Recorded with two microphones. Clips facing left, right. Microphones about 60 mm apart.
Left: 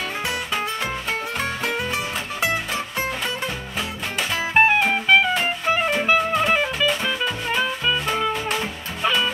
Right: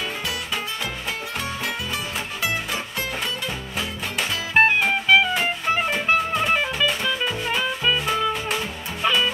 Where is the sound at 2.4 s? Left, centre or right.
Left.